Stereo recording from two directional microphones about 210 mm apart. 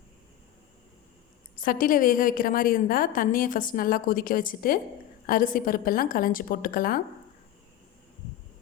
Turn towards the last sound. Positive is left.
turn(degrees=45)  # may be behind; listen again after turning